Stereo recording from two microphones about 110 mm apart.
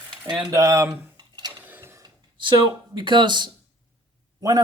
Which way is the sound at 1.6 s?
15° right (ahead or behind).